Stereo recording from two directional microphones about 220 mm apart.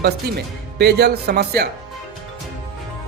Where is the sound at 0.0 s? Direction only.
50° right (ahead or behind).